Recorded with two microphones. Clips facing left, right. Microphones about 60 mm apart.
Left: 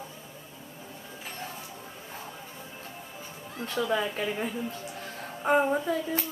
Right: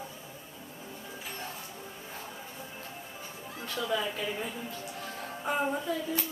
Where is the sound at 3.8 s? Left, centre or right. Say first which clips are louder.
Left 4 dB; left.